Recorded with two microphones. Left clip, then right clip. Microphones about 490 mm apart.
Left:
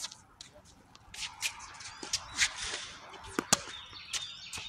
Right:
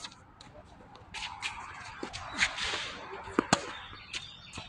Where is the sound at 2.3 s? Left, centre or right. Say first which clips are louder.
Right 2 dB; left.